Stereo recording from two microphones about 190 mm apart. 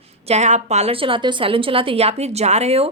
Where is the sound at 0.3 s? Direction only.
35° right (ahead or behind).